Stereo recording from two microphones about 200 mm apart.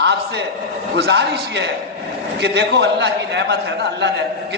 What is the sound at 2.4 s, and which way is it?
A man's voice, 60° right (ahead or behind).